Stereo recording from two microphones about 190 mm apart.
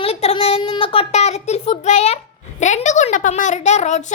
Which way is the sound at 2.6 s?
40° left (ahead or behind).